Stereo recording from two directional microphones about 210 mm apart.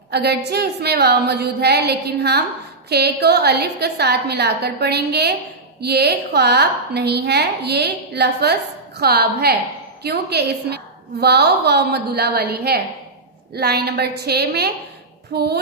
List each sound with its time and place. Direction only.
0.1 s a woman's voice: 50° right (ahead or behind)